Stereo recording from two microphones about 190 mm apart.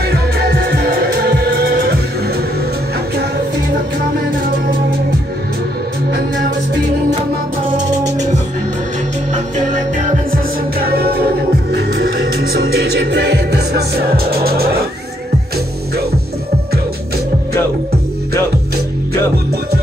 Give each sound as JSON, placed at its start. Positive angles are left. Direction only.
{"t": 0.0, "sound": "music", "side_deg": -55}
{"t": 7.7, "sound": "music", "side_deg": -40}
{"t": 11.7, "sound": "music", "side_deg": -60}